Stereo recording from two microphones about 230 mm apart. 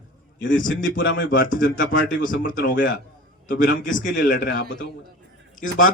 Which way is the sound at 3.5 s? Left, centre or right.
Left.